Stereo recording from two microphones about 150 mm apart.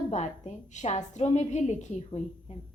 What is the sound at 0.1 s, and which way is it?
A woman's voice, 50° left (ahead or behind).